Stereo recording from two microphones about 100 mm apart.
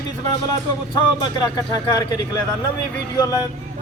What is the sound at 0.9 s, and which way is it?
A man's voice, 45° left (ahead or behind).